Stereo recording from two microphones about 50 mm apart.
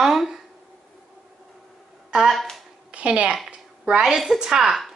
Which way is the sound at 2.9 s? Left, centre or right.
Right.